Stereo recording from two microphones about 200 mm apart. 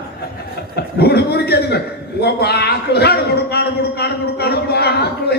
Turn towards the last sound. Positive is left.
turn(degrees=55)  # may be behind; listen again after turning